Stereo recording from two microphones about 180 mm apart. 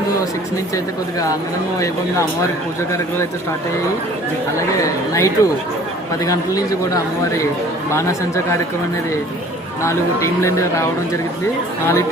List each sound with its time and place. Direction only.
4.8 s speech: 15° left (ahead or behind)
9.8 s speech: 15° left (ahead or behind)